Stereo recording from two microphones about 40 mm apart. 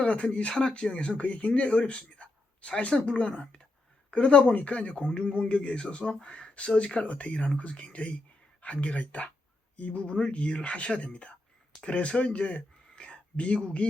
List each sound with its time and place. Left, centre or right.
0.0 s speech: left